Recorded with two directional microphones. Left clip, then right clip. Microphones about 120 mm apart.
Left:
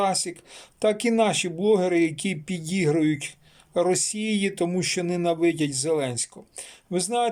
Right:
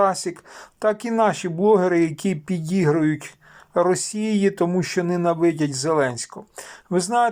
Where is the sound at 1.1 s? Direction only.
15° left (ahead or behind).